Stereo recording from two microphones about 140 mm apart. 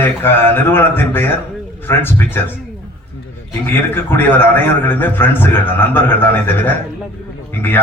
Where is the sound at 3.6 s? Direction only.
15° left (ahead or behind).